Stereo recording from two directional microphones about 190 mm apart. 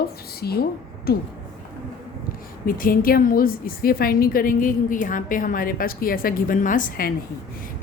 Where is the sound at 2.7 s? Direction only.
50° left (ahead or behind).